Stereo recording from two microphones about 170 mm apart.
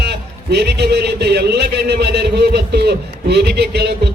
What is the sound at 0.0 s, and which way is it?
A man's voice, 75° right (ahead or behind).